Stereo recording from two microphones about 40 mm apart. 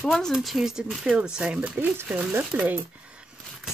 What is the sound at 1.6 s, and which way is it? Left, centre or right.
Speech, right.